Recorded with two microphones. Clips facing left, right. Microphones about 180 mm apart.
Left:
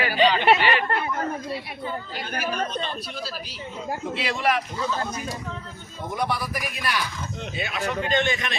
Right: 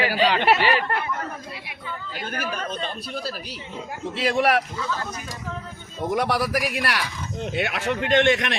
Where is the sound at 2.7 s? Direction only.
45° right (ahead or behind); by 4.6 s 65° right (ahead or behind).